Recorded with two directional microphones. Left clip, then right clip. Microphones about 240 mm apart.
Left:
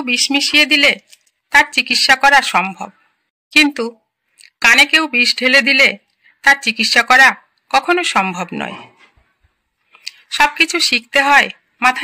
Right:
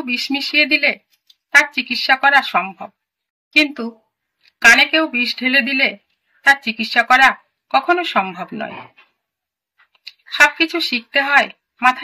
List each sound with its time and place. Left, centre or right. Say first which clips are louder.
0.0 s speech: left 6 dB; left
9.9 s speech: right 1 dB; left